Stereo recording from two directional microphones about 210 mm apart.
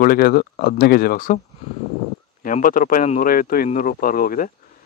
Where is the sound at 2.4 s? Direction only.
40° left (ahead or behind).